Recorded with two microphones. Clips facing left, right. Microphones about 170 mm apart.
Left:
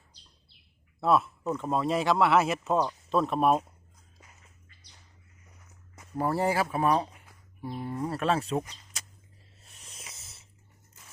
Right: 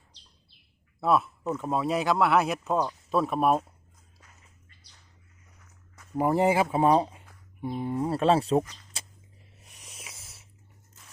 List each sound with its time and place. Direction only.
1.0 s speech: centre (ahead or behind)
6.1 s speech: 15° right (ahead or behind); by 8.6 s 35° right (ahead or behind)
8.9 s a sound: 30° right (ahead or behind)
9.6 s snake: 15° right (ahead or behind)